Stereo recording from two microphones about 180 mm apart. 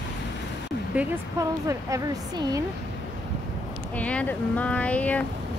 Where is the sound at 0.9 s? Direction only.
10° right (ahead or behind).